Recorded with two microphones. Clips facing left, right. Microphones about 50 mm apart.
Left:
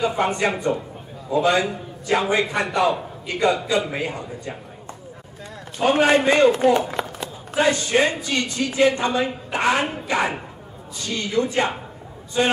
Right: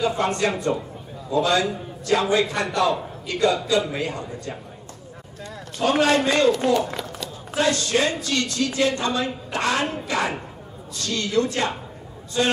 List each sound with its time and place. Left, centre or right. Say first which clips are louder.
0.1 s a man's voice: left 1 dB; centre